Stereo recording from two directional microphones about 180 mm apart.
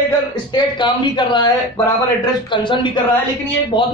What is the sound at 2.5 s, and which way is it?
A man's voice, 25° left (ahead or behind).